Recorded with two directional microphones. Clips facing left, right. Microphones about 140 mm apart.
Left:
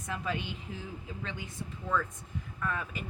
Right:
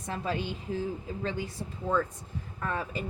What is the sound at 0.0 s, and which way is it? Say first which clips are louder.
Speech: right 3 dB; 35° right (ahead or behind).